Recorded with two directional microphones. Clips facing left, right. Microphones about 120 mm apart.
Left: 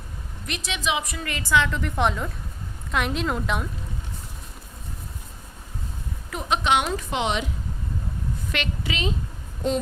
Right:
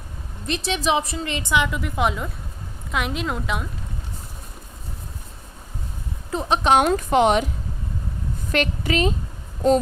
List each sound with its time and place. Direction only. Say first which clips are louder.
0.4 s a woman's voice: right 6 dB; 30° right (ahead or behind); by 3.7 s centre (ahead or behind)
6.3 s a woman's voice: right 4 dB; 35° right (ahead or behind)
8.5 s a woman's voice: right 9 dB; 45° right (ahead or behind)
9.6 s child singing: right 7 dB; 40° right (ahead or behind)